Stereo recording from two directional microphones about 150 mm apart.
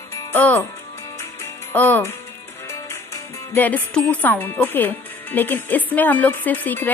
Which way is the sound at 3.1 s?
10° left (ahead or behind).